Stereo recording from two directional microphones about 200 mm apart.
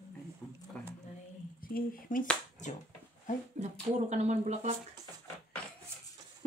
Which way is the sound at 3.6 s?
35° right (ahead or behind).